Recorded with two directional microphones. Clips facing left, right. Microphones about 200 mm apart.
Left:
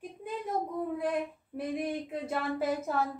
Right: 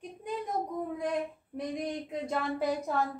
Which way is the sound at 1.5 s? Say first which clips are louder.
Left 2 dB; 5° left (ahead or behind).